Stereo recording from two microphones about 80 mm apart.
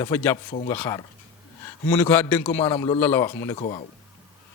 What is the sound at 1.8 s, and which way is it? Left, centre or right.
A man's voice, left.